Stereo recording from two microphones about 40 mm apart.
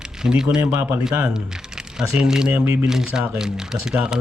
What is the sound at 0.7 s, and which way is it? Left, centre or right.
Speech, right.